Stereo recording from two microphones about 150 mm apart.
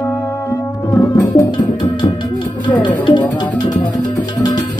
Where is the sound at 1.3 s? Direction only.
30° left (ahead or behind).